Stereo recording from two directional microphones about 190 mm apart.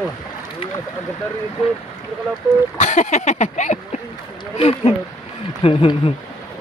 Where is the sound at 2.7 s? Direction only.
40° left (ahead or behind).